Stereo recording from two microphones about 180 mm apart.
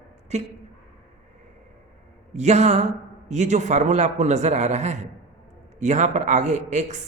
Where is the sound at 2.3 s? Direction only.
40° right (ahead or behind).